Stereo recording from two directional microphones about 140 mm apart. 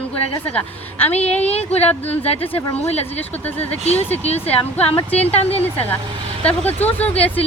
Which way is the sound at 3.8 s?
45° left (ahead or behind).